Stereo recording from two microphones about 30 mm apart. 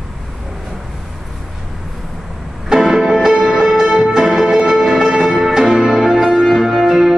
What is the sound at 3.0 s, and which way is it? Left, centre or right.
Music, centre.